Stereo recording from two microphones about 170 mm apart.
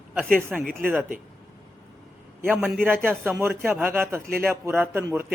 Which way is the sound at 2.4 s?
10° right (ahead or behind).